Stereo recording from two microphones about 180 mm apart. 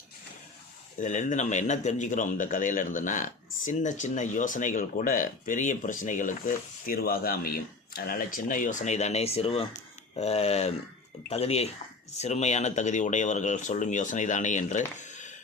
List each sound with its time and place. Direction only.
0.9 s speech: 45° left (ahead or behind)